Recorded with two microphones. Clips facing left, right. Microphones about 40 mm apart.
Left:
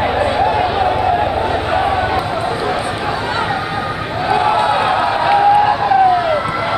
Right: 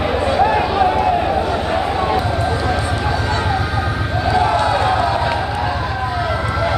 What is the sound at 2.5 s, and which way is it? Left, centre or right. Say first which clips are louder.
Run: left 1 dB; centre.